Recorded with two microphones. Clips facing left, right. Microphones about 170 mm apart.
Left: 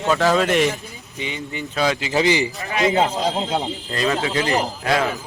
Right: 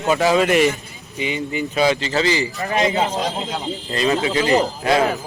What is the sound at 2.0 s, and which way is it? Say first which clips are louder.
Speech: left 1 dB; 15° left (ahead or behind).